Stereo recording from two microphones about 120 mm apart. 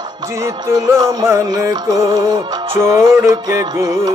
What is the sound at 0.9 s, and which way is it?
Music, 25° right (ahead or behind).